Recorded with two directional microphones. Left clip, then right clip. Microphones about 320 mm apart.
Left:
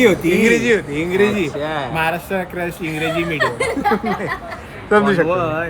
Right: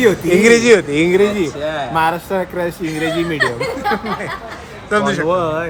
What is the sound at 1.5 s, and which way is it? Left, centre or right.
Speech, left.